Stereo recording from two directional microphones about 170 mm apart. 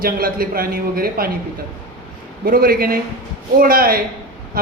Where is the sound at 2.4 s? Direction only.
60° right (ahead or behind).